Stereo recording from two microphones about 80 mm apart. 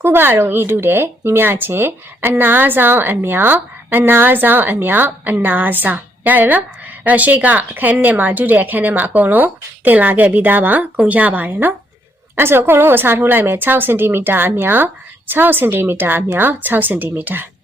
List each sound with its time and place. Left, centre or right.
0.0 s speech: right